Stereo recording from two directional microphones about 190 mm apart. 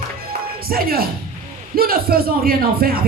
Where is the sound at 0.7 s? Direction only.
50° right (ahead or behind).